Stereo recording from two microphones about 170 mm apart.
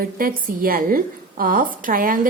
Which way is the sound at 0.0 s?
55° right (ahead or behind).